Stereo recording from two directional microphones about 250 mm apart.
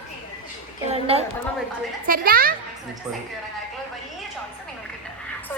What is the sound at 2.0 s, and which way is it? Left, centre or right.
Speech, right.